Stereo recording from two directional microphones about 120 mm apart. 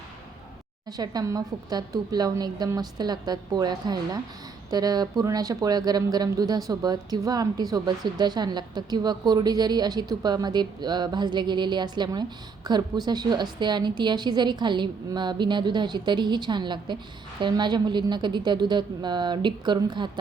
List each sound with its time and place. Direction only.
0.9 s a woman's voice: 35° right (ahead or behind)